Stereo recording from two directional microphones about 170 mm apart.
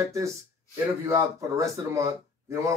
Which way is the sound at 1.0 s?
15° right (ahead or behind).